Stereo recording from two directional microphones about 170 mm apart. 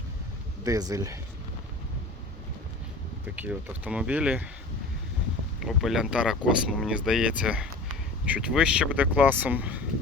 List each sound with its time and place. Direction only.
0.6 s speech: 20° right (ahead or behind)
3.3 s speech: 10° right (ahead or behind)
5.5 s speech: centre (ahead or behind)